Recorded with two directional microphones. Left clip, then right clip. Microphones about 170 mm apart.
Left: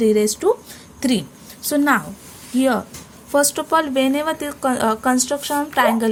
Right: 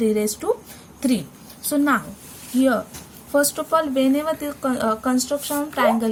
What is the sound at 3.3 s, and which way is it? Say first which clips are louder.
A woman's voice: left 2 dB; 45° left (ahead or behind).